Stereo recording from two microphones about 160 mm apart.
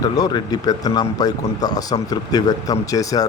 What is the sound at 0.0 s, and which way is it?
A man's voice, 25° left (ahead or behind).